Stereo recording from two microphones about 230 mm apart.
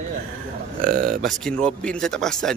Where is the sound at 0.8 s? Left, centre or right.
Right.